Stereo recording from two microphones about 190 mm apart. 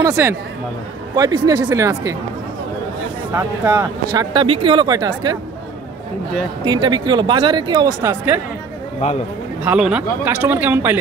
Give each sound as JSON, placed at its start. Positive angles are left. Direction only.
{"t": 0.0, "sound": "speech", "side_deg": -15}
{"t": 3.3, "sound": "speech", "side_deg": -15}
{"t": 6.6, "sound": "speech", "side_deg": -25}
{"t": 9.6, "sound": "speech", "side_deg": -5}